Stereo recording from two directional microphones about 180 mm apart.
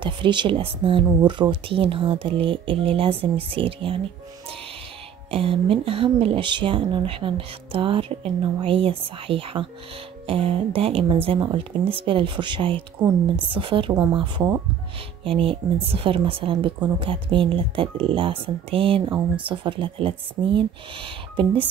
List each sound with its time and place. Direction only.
0.0 s speech: 25° right (ahead or behind)
5.3 s speech: 30° right (ahead or behind)